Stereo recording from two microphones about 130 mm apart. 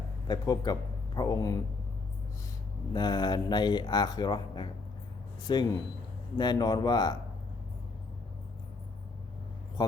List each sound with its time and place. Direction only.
0.3 s a man's voice: 30° left (ahead or behind)
2.9 s speech: 35° left (ahead or behind)